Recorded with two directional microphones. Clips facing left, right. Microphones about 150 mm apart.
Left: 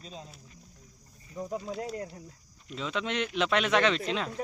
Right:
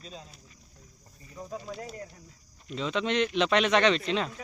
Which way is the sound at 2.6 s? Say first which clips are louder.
Right 4 dB; 5° left (ahead or behind).